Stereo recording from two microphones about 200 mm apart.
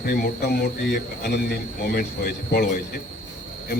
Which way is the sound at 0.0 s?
50° left (ahead or behind).